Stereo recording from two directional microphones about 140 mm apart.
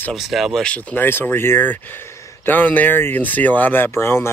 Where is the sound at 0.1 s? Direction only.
Centre (ahead or behind).